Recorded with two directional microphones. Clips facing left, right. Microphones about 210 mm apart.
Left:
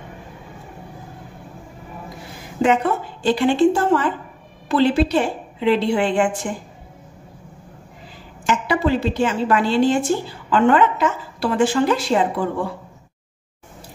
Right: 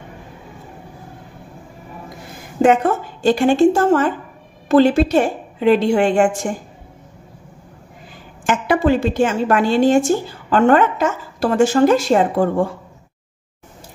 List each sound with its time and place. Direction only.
2.6 s a woman's voice: 45° right (ahead or behind)
8.5 s a woman's voice: 50° right (ahead or behind)